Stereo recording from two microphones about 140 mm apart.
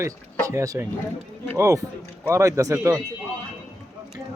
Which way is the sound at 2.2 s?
20° right (ahead or behind).